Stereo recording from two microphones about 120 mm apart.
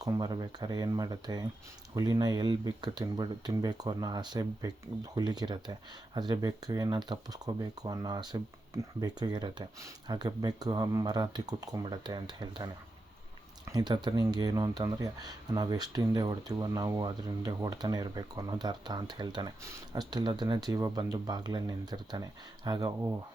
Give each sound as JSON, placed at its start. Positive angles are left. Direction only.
{"t": 0.0, "sound": "speech", "side_deg": -30}